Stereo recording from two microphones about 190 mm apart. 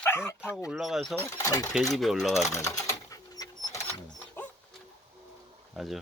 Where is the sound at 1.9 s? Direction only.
Centre (ahead or behind).